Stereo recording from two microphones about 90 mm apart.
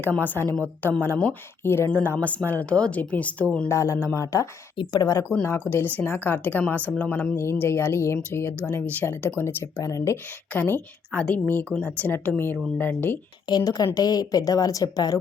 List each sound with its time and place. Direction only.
0.0 s speech: 20° left (ahead or behind)
1.9 s speech: 15° left (ahead or behind)
3.7 s speech: 35° left (ahead or behind)
4.8 s a woman's voice: 50° left (ahead or behind)
5.4 s speech: 25° left (ahead or behind)
7.3 s speech: 30° left (ahead or behind)
10.5 s speech: 20° left (ahead or behind)
13.5 s a woman's voice: 40° left (ahead or behind)